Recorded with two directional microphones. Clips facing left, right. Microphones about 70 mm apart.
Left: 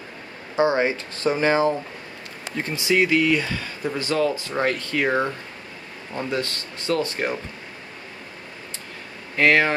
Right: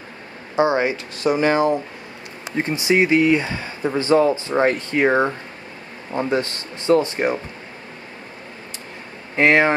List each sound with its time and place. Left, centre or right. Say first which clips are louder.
0.6 s speech: right 2 dB; right
2.5 s speech: right 3 dB; right
9.4 s speech: right 3 dB; right